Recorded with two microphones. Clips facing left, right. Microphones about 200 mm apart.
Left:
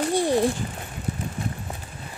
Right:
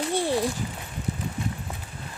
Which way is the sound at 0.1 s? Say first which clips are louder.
Left 3 dB; 15° left (ahead or behind).